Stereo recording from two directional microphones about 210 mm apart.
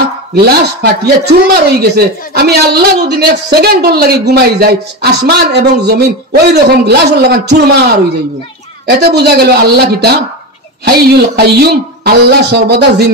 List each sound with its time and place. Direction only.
0.8 s speech: 50° right (ahead or behind)
8.8 s speech: 50° right (ahead or behind)